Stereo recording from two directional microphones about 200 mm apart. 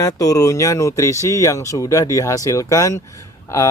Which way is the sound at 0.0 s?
15° left (ahead or behind).